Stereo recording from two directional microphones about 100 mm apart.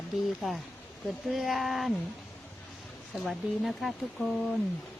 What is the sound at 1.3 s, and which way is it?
Speech, centre (ahead or behind).